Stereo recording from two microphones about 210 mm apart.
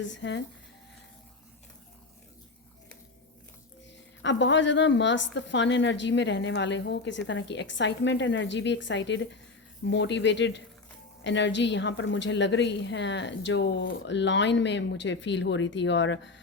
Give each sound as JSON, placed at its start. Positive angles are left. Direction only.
{"t": 0.0, "sound": "a woman's voice", "side_deg": 60}
{"t": 4.2, "sound": "a woman's voice", "side_deg": 60}